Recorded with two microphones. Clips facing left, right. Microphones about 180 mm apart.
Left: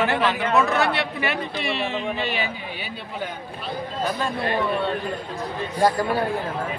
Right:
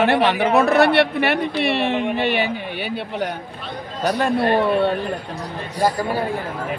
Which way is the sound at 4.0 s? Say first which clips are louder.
Right 6 dB; 75° right (ahead or behind).